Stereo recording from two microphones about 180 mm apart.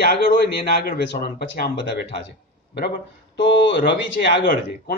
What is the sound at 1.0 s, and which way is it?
Speech, 65° left (ahead or behind).